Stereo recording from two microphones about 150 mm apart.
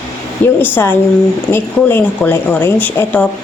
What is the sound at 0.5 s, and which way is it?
Speech, 15° left (ahead or behind).